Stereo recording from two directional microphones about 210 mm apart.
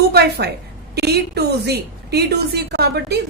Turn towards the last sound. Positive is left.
turn(degrees=-50)  # may be behind; listen again after turning